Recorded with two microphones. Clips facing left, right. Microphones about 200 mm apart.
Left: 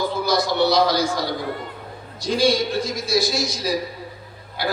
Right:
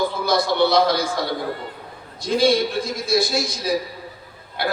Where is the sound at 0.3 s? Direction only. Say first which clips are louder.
Right 1 dB; 55° right (ahead or behind).